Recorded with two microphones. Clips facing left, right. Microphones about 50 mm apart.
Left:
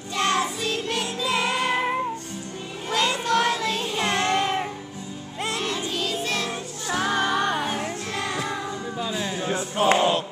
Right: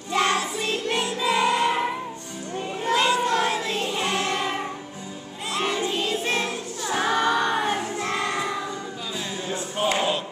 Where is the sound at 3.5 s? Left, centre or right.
Right.